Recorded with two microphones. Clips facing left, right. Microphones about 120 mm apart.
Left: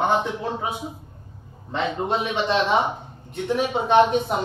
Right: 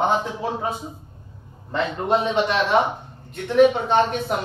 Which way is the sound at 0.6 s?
5° left (ahead or behind).